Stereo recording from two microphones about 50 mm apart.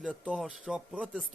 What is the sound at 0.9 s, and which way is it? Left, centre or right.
Speech, right.